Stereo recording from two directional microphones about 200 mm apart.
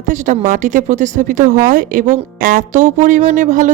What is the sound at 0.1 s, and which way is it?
Speech, 40° right (ahead or behind).